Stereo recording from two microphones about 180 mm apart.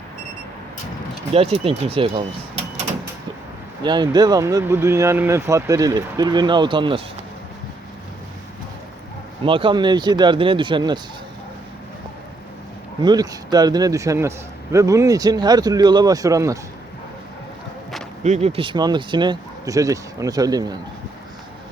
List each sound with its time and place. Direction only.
1.3 s speech: 35° right (ahead or behind)
3.8 s speech: 25° right (ahead or behind)
9.4 s speech: 30° right (ahead or behind)
13.0 s speech: 25° right (ahead or behind)
18.2 s speech: 35° right (ahead or behind); by 20.7 s 20° right (ahead or behind)